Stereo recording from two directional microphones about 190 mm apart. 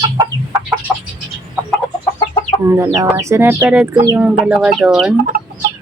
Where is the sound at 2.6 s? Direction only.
15° right (ahead or behind).